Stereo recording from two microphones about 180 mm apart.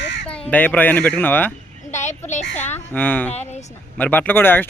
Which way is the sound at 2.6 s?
10° left (ahead or behind).